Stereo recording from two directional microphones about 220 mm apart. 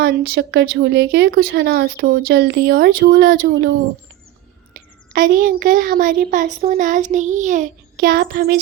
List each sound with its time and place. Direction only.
0.0 s a child's voice: 45° right (ahead or behind)